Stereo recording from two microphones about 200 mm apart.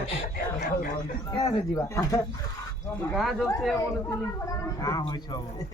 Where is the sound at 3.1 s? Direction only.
Centre (ahead or behind).